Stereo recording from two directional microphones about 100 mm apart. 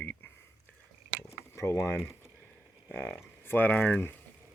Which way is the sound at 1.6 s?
25° left (ahead or behind).